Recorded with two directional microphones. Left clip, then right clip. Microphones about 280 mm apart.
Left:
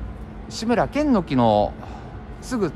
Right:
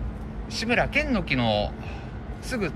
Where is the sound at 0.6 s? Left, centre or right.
Centre.